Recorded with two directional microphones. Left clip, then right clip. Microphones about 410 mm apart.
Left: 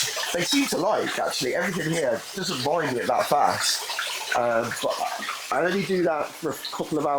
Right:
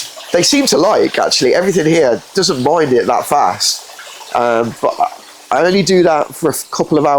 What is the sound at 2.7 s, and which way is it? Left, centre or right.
Speech, right.